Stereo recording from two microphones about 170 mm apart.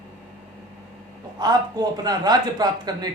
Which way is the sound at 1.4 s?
25° right (ahead or behind).